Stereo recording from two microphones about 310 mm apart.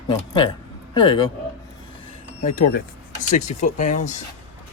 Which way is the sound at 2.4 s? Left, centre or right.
Left.